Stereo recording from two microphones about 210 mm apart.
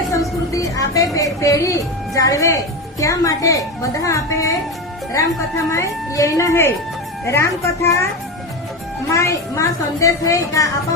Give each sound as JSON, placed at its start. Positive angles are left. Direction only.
{"t": 0.2, "sound": "speech", "side_deg": 15}
{"t": 5.7, "sound": "speech", "side_deg": 15}
{"t": 9.0, "sound": "speech", "side_deg": 15}